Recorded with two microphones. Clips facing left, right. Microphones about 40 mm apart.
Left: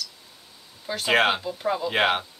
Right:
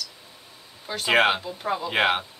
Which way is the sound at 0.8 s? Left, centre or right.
Centre.